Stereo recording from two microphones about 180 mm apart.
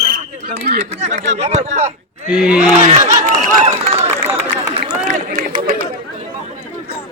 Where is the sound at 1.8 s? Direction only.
5° right (ahead or behind).